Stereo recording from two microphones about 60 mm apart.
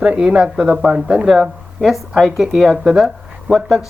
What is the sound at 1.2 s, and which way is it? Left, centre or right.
Speech, centre.